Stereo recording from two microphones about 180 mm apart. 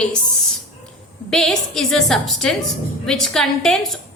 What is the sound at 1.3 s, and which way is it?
A woman's voice, centre (ahead or behind).